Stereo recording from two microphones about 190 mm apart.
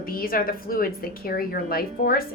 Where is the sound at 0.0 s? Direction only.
50° left (ahead or behind).